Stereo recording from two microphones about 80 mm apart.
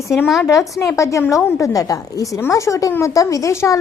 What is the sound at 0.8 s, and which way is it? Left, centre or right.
A woman's voice, left.